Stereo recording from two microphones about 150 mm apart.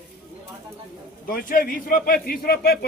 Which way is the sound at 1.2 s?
70° left (ahead or behind).